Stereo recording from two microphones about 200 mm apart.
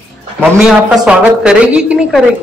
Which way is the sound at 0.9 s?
5° right (ahead or behind).